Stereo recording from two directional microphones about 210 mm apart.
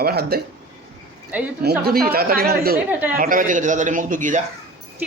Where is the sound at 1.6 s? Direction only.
45° right (ahead or behind).